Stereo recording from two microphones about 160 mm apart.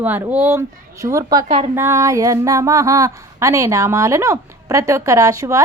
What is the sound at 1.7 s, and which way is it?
Speech, 15° right (ahead or behind).